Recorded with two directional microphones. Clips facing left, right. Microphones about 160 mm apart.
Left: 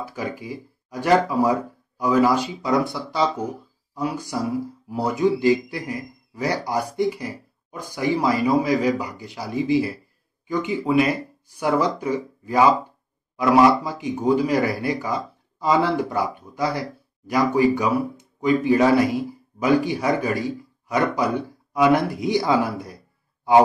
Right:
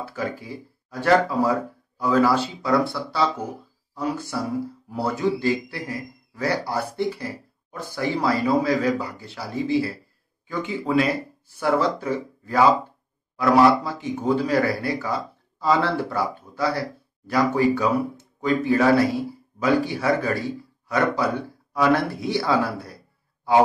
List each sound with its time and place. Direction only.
0.0 s a man's voice: 15° left (ahead or behind)